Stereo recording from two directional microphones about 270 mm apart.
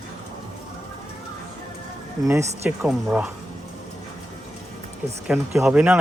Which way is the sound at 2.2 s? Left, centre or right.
Centre.